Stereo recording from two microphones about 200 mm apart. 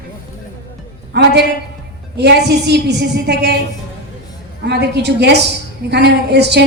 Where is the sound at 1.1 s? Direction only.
55° right (ahead or behind).